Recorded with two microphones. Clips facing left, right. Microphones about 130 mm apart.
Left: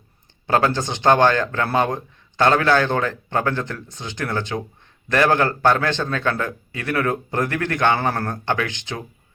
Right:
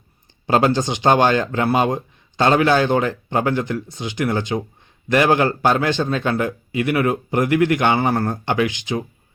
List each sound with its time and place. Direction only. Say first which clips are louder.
0.4 s speech: right 3 dB; 20° right (ahead or behind)